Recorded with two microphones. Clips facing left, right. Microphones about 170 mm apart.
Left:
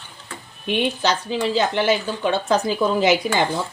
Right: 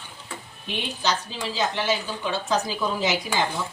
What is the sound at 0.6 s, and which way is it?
Speech, 60° left (ahead or behind).